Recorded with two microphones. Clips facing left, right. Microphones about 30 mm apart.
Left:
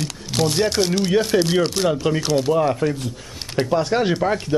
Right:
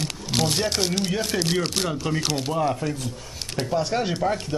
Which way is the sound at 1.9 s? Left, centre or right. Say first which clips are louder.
Left 7 dB; left.